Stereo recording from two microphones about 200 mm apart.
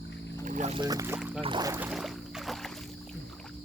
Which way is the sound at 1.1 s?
5° right (ahead or behind).